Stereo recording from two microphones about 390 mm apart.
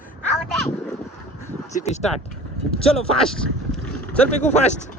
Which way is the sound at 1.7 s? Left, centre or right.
Centre.